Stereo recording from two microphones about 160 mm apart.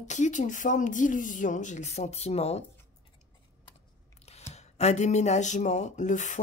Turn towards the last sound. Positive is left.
turn(degrees=50)  # may be behind; listen again after turning